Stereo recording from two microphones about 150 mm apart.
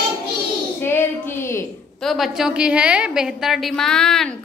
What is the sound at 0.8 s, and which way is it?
Child singing, 15° left (ahead or behind).